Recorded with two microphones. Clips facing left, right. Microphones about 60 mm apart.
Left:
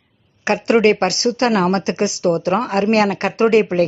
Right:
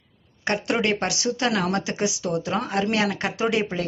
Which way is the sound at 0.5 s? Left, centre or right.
Left.